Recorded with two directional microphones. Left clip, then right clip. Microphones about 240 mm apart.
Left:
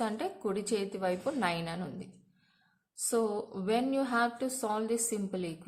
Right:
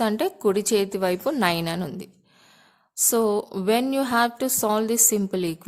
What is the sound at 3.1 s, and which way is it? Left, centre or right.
Speech, right.